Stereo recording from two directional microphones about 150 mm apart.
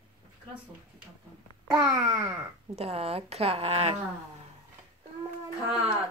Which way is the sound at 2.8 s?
40° right (ahead or behind).